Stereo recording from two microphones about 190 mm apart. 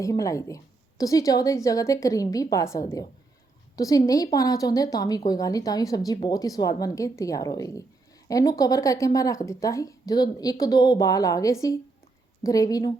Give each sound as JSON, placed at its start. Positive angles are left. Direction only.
{"t": 0.0, "sound": "a woman's voice", "side_deg": 15}